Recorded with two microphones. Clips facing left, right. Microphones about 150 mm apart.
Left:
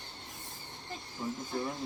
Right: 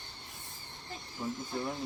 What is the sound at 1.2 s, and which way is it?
Speech, 10° right (ahead or behind).